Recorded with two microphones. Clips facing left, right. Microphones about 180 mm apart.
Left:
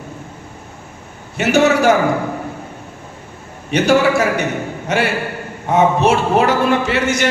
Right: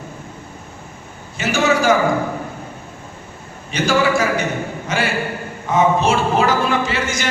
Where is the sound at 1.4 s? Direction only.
65° left (ahead or behind).